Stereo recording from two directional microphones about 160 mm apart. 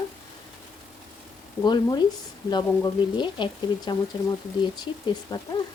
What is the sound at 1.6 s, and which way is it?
Speech, 25° left (ahead or behind).